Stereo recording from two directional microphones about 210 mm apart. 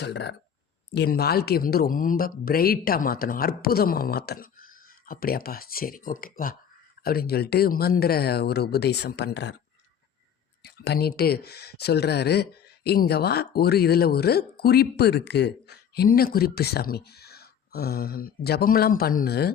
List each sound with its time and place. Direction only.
0.0 s speech: 55° left (ahead or behind)
10.8 s speech: 50° left (ahead or behind)